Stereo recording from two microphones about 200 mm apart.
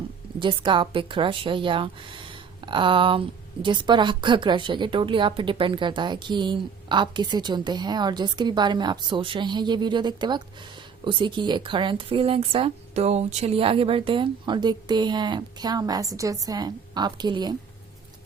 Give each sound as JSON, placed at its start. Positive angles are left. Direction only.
{"t": 0.3, "sound": "a woman's voice", "side_deg": -25}